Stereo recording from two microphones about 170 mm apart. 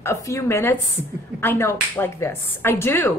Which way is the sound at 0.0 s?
15° left (ahead or behind).